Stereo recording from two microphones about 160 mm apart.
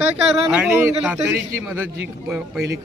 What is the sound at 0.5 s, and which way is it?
A man's voice, 10° right (ahead or behind).